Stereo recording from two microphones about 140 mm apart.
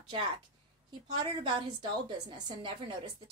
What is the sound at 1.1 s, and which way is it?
A woman's voice, 30° right (ahead or behind).